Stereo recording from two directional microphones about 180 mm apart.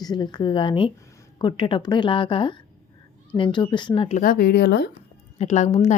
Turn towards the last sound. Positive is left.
turn(degrees=40)  # may be behind; listen again after turning